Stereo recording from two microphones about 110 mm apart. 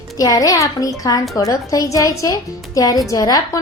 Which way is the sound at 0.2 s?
35° left (ahead or behind).